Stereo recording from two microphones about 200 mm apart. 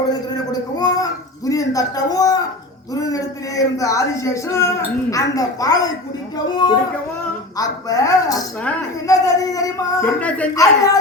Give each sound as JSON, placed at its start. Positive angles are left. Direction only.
{"t": 0.8, "sound": "a sound", "side_deg": 20}
{"t": 1.5, "sound": "speech", "side_deg": 15}
{"t": 7.6, "sound": "speech", "side_deg": 15}
{"t": 10.2, "sound": "speech", "side_deg": 5}
{"t": 10.5, "sound": "speech", "side_deg": 15}